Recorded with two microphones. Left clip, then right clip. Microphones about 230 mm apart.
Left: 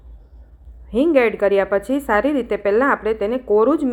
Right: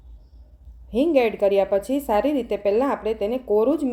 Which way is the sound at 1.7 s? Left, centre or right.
Centre.